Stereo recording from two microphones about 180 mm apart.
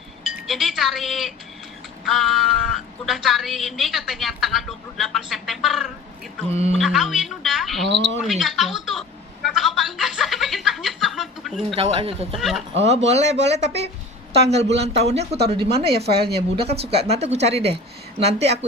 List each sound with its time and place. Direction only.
0.3 s a woman's voice: centre (ahead or behind)
6.5 s speech: 35° right (ahead or behind)
6.7 s a woman's voice: centre (ahead or behind)
7.9 s speech: 75° right (ahead or behind)
8.2 s a woman's voice: centre (ahead or behind)
11.7 s speech: 30° right (ahead or behind)
12.3 s a woman's voice: centre (ahead or behind)
13.1 s speech: 40° right (ahead or behind)